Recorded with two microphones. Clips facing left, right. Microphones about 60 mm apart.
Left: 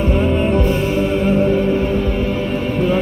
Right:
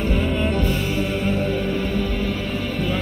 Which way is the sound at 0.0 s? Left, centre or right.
Left.